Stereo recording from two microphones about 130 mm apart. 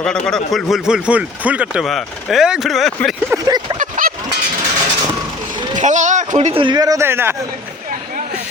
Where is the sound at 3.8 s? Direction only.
90° right.